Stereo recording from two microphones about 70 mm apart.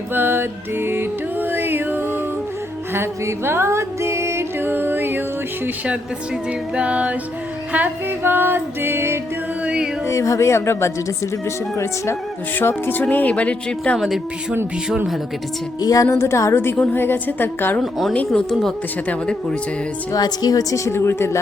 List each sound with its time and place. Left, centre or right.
0.1 s music: right
5.6 s speech: centre
6.7 s music: centre; by 9.1 s right
9.6 s music: centre
10.1 s a woman's voice: left
12.5 s speech: left
15.8 s a woman's voice: left
16.0 s a woman's voice: left
16.7 s speech: left
18.3 s speech: centre
20.1 s a woman's voice: left